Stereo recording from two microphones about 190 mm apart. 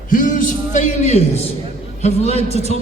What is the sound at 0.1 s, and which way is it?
A man's voice, 45° left (ahead or behind).